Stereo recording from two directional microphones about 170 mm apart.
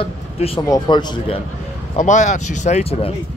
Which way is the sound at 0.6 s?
25° left (ahead or behind).